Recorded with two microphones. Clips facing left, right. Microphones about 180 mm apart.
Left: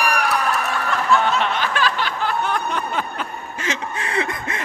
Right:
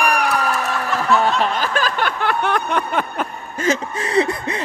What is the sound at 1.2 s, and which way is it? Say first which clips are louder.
Snicker: right 2 dB; 40° right (ahead or behind).